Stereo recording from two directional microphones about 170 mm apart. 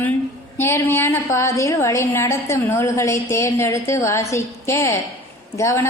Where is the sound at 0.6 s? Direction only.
15° left (ahead or behind).